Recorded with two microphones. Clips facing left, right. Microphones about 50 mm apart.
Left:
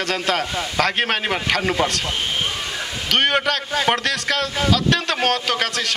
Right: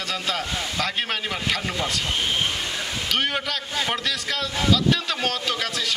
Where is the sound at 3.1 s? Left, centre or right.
Left.